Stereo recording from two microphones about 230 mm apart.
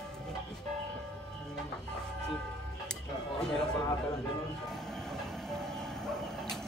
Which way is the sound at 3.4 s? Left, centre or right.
Centre.